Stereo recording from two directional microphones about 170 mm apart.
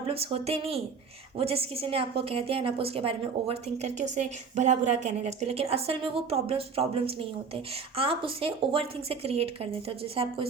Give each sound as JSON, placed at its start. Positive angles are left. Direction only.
{"t": 0.1, "sound": "a woman's voice", "side_deg": -35}